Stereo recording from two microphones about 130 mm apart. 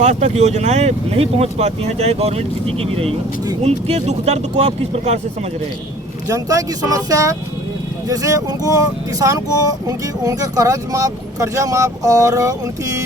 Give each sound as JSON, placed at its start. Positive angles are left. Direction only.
{"t": 0.0, "sound": "speech", "side_deg": -60}
{"t": 6.2, "sound": "speech", "side_deg": -25}